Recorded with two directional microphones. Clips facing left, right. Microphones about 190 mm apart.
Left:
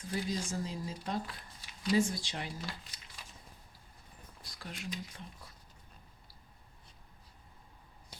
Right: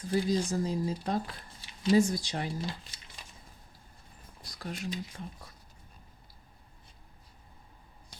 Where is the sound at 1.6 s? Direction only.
25° right (ahead or behind).